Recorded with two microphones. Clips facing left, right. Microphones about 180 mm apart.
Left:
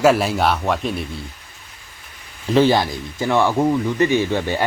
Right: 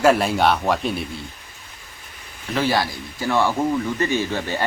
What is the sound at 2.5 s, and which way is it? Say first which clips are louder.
Speech: left 6 dB; 25° left (ahead or behind).